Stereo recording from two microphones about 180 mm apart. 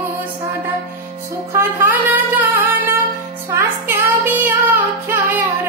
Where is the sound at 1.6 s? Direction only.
10° right (ahead or behind).